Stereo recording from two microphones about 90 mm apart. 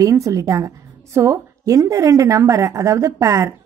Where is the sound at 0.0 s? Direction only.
35° right (ahead or behind).